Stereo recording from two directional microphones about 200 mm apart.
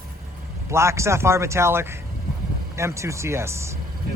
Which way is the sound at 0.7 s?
15° right (ahead or behind).